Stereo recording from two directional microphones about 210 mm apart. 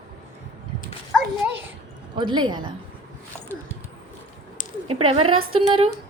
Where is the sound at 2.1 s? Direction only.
20° right (ahead or behind).